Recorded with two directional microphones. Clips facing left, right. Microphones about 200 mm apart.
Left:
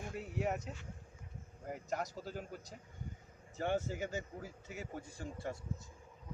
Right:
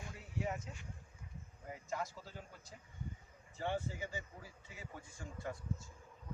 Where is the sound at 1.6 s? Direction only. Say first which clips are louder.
Left 3 dB; 45° left (ahead or behind).